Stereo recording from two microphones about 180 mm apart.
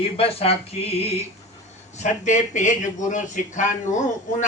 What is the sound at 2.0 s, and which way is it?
A man's voice, 40° left (ahead or behind).